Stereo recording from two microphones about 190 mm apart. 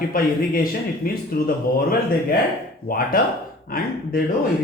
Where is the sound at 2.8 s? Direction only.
50° left (ahead or behind).